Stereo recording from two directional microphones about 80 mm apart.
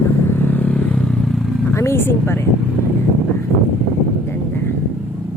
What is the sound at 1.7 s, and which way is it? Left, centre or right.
Speech, left.